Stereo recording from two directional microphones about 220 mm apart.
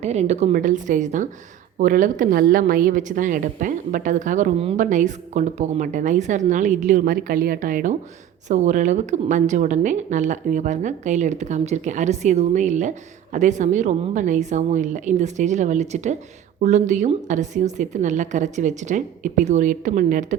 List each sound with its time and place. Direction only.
0.0 s a woman's voice: 30° right (ahead or behind)